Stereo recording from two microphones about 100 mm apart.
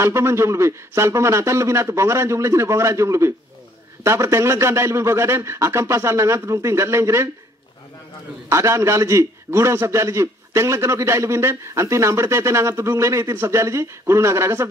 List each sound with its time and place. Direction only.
0.0 s a man's voice: 25° right (ahead or behind)
8.5 s a man's voice: 30° right (ahead or behind)